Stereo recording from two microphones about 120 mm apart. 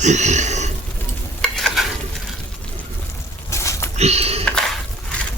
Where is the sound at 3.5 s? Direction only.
25° left (ahead or behind).